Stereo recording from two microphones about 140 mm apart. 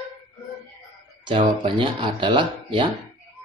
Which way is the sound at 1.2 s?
35° right (ahead or behind).